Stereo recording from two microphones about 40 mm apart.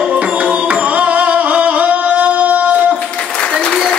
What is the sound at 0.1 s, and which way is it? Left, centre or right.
Music, right.